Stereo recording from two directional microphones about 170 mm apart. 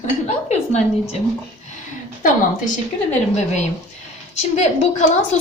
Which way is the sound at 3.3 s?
45° left (ahead or behind).